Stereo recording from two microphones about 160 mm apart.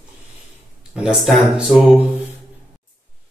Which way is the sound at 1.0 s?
Centre (ahead or behind).